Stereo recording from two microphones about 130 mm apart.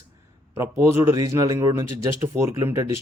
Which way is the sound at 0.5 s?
20° right (ahead or behind).